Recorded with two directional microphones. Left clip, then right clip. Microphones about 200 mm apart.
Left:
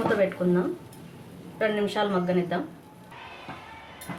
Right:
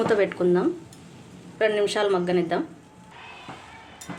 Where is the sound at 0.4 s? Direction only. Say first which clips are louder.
Right 4 dB; 55° right (ahead or behind).